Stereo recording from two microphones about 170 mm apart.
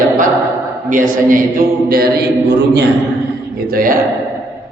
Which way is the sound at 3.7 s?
55° right (ahead or behind).